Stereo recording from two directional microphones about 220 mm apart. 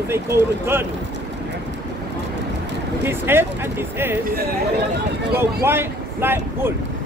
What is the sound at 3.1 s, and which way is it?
Speech, 10° right (ahead or behind).